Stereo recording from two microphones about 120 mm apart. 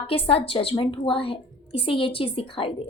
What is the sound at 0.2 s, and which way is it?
A woman's voice, 50° left (ahead or behind).